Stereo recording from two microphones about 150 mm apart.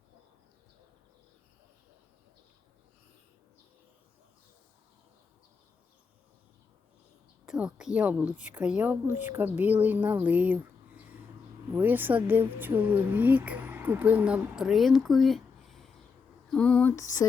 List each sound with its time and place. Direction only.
7.4 s speech: 5° right (ahead or behind)
16.5 s a sound: 5° left (ahead or behind)
16.9 s lullaby: 20° left (ahead or behind)